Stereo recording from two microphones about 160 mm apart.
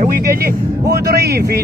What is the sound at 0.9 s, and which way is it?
Speech, 90° right.